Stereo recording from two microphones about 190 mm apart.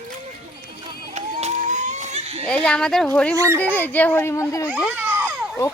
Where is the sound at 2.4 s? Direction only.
5° left (ahead or behind).